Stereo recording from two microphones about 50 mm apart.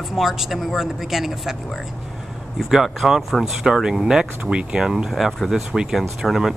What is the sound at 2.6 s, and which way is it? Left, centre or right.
A woman's voice, centre.